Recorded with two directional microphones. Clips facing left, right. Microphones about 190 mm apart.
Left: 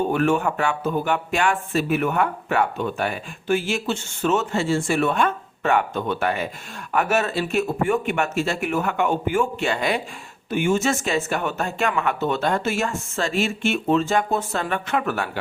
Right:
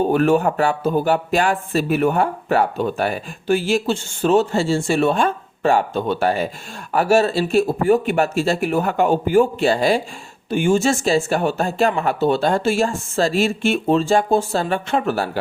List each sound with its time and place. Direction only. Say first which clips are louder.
0.0 s speech: right 4 dB; 35° right (ahead or behind)